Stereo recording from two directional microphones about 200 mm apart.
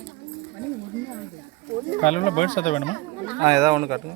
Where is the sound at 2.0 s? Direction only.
35° left (ahead or behind).